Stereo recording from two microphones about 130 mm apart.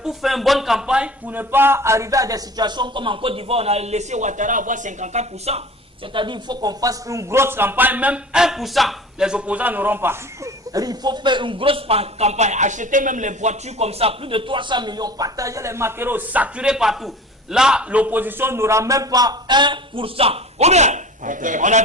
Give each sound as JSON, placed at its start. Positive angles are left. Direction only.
{"t": 0.0, "sound": "speech", "side_deg": 0}
{"t": 6.1, "sound": "a man's voice", "side_deg": -35}